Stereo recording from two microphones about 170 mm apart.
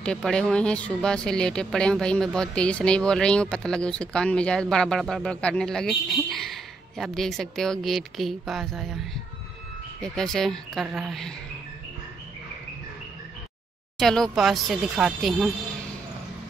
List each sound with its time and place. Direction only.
0.0 s speech: 5° left (ahead or behind)
13.9 s speech: centre (ahead or behind)